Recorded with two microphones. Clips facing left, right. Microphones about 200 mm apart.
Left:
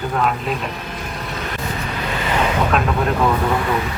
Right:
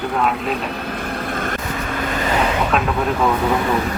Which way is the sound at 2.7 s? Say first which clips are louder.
Even; centre (ahead or behind).